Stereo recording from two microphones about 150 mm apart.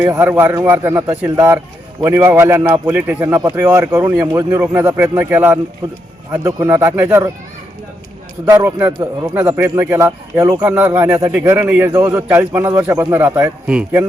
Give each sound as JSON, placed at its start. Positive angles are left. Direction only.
{"t": 0.0, "sound": "speech", "side_deg": -15}
{"t": 8.4, "sound": "speech", "side_deg": -15}